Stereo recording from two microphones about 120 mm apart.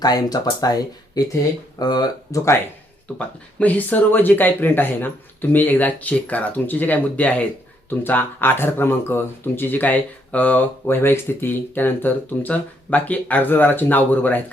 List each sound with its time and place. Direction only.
0.0 s speech: 35° left (ahead or behind)
3.2 s speech: 15° left (ahead or behind)